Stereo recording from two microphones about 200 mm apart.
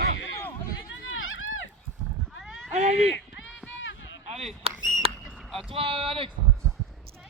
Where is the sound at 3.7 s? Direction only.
70° left (ahead or behind).